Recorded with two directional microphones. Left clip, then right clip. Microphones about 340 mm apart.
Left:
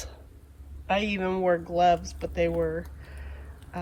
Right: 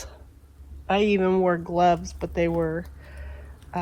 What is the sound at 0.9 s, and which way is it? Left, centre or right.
Speech, centre.